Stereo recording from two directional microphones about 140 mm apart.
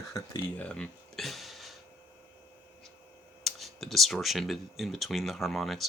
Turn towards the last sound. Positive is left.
turn(degrees=0)  # may be behind; listen again after turning